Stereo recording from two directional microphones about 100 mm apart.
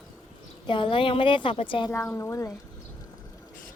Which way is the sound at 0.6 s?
55° left (ahead or behind).